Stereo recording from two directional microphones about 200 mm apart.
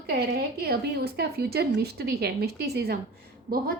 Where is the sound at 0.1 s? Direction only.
50° right (ahead or behind).